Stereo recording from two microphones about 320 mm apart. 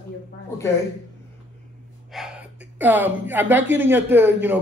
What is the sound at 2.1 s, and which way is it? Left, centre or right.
A woman's voice, centre.